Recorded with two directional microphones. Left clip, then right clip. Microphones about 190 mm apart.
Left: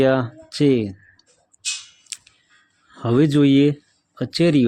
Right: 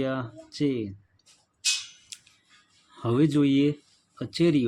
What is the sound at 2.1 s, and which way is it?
Scissors, 40° left (ahead or behind).